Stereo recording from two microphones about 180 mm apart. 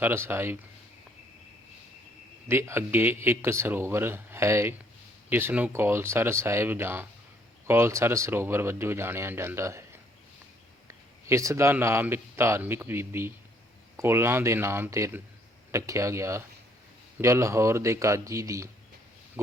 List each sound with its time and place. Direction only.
0.0 s speech: 10° right (ahead or behind)
2.5 s speech: 15° right (ahead or behind)